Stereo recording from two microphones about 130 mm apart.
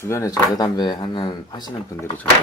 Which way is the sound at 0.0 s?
25° left (ahead or behind).